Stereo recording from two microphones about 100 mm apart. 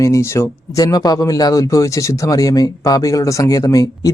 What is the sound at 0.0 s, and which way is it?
Speech, 30° left (ahead or behind).